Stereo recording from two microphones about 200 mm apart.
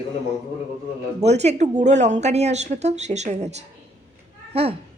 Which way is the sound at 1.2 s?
35° right (ahead or behind).